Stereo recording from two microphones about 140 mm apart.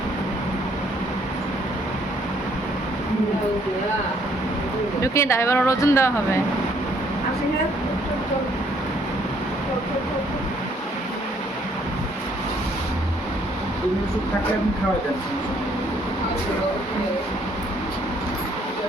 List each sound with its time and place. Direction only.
5.0 s speech: 20° left (ahead or behind)